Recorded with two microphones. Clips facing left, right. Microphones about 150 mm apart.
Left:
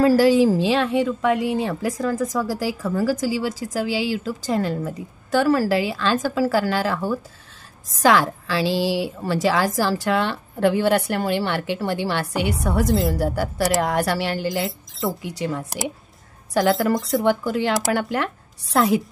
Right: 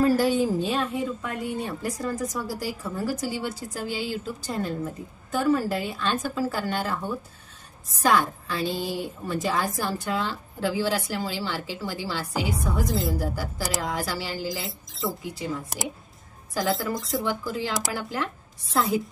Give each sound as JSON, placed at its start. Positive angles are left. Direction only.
{"t": 0.0, "sound": "a woman's voice", "side_deg": 90}
{"t": 14.5, "sound": "speech", "side_deg": 0}
{"t": 15.2, "sound": "a woman's voice", "side_deg": 70}